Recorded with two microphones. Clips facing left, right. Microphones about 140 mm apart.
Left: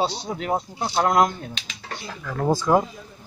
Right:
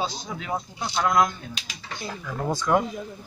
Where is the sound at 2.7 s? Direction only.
25° left (ahead or behind).